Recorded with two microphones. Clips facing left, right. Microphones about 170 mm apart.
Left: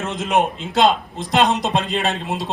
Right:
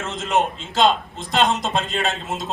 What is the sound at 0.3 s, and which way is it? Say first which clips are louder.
Speech: left 2 dB; 60° left (ahead or behind).